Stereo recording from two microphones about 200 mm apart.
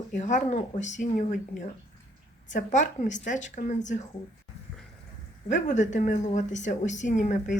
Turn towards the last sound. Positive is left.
turn(degrees=40)  # may be behind; listen again after turning